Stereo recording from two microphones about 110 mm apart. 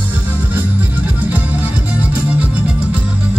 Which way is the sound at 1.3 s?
15° right (ahead or behind).